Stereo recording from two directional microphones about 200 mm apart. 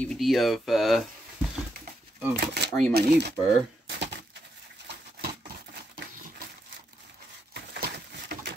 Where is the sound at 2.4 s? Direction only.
55° right (ahead or behind).